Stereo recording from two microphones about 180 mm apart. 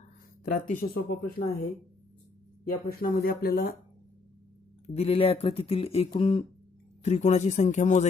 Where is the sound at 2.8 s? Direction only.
55° left (ahead or behind).